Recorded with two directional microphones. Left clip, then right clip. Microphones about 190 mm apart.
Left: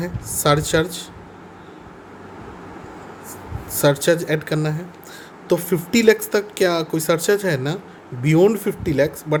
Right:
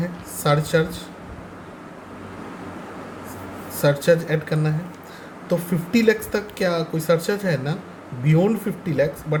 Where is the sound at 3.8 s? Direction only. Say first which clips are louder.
Left 1 dB; 50° left (ahead or behind).